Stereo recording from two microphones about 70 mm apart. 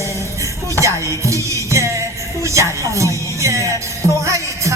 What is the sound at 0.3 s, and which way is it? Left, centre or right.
Music, right.